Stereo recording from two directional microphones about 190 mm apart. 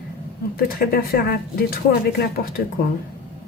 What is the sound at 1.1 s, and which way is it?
Speech, 55° left (ahead or behind).